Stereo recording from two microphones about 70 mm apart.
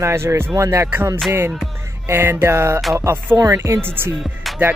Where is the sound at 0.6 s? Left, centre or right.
Right.